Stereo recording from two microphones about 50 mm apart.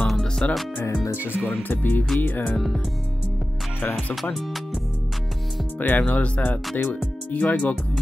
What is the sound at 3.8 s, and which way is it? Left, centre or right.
Speech, left.